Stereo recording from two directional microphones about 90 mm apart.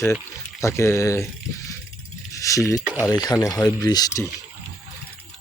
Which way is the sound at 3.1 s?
45° left (ahead or behind).